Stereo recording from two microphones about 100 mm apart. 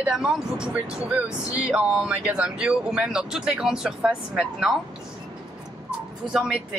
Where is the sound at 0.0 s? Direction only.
5° right (ahead or behind).